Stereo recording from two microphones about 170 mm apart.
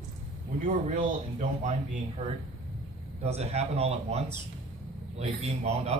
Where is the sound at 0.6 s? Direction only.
45° right (ahead or behind).